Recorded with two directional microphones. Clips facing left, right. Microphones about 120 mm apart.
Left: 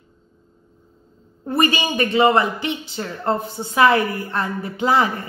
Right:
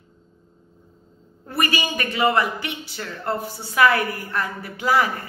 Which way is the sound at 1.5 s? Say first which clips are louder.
Left 5 dB; 25° left (ahead or behind).